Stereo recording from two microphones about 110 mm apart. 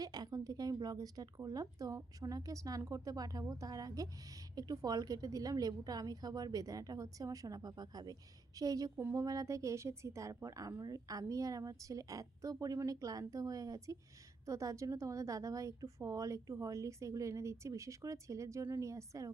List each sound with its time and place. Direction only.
0.0 s a woman's voice: 35° right (ahead or behind)